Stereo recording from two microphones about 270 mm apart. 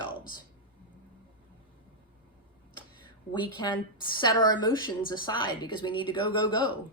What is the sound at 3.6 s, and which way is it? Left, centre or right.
Speech, centre.